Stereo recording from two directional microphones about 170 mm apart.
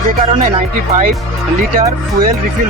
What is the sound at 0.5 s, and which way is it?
Speech, 45° right (ahead or behind).